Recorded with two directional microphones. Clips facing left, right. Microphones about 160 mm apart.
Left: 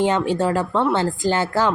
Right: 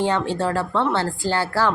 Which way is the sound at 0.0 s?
15° left (ahead or behind).